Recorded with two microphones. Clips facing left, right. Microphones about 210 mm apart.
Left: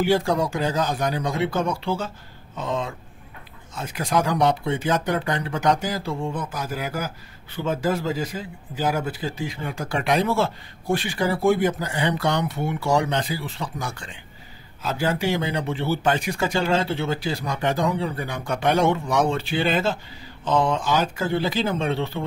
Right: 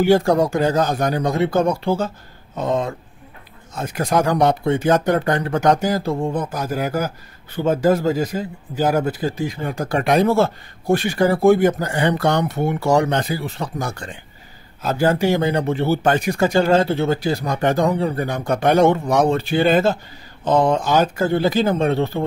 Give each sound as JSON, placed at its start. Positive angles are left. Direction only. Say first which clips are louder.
{"t": 0.0, "sound": "speech", "louder": "right 6 dB", "side_deg": -45}